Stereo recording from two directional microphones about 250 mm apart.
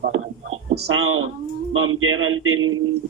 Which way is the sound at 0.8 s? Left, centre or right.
Right.